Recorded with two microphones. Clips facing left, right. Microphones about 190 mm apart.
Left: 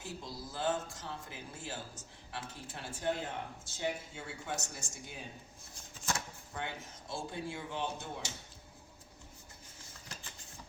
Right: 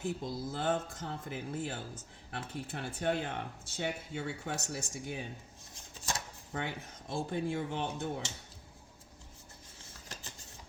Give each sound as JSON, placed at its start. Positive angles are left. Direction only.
{"t": 0.0, "sound": "speech", "side_deg": -55}
{"t": 6.5, "sound": "speech", "side_deg": -60}